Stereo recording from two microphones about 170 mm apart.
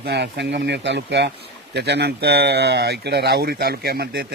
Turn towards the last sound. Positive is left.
turn(degrees=-70)  # may be behind; listen again after turning